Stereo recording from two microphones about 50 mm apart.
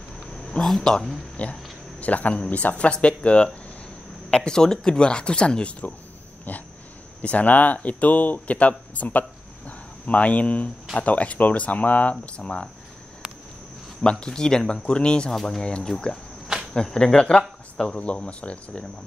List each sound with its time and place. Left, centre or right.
0.3 s a sound: centre
0.7 s speech: centre
1.3 s speech: left
7.2 s speech: left
14.2 s speech: centre
15.3 s speech: centre
15.6 s speech: centre